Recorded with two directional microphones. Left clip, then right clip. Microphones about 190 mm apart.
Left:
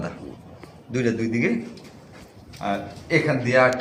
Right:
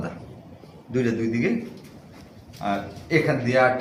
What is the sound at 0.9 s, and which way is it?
Speech, 25° left (ahead or behind).